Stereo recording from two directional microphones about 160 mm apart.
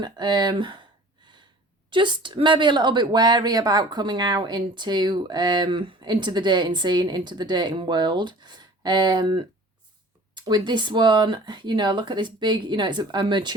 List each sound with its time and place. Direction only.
0.0 s a woman's voice: 25° right (ahead or behind)
1.9 s a woman's voice: 30° right (ahead or behind)